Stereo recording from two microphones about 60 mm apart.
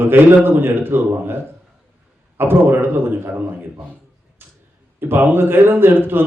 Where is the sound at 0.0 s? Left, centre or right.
Right.